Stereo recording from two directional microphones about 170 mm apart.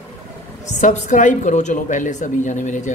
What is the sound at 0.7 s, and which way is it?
Speech, 45° left (ahead or behind).